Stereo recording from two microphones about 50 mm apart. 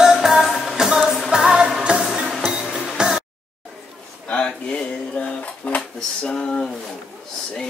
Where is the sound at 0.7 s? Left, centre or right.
Centre.